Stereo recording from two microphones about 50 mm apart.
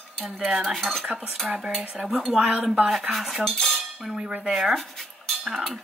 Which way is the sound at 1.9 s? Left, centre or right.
Centre.